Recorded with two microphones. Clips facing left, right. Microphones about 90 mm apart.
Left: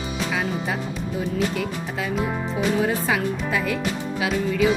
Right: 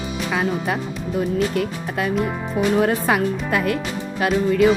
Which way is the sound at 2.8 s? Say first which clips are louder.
Right 4 dB; 55° right (ahead or behind).